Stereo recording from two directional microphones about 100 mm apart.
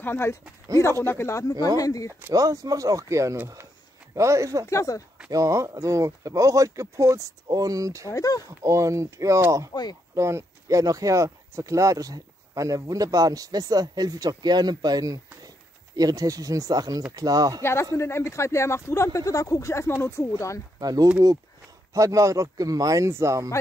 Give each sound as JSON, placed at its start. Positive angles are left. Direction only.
{"t": 0.0, "sound": "speech", "side_deg": 25}
{"t": 2.3, "sound": "speech", "side_deg": -35}
{"t": 4.6, "sound": "speech", "side_deg": 30}
{"t": 5.3, "sound": "speech", "side_deg": -30}
{"t": 8.1, "sound": "speech", "side_deg": 35}
{"t": 8.5, "sound": "speech", "side_deg": -30}
{"t": 9.7, "sound": "speech", "side_deg": 50}
{"t": 10.1, "sound": "speech", "side_deg": -30}
{"t": 17.6, "sound": "speech", "side_deg": 25}
{"t": 20.8, "sound": "speech", "side_deg": -40}